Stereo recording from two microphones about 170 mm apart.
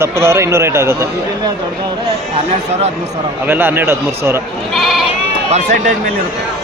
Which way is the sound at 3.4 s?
10° right (ahead or behind).